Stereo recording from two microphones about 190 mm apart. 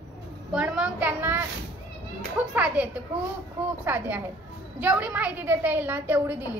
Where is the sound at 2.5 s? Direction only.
5° right (ahead or behind).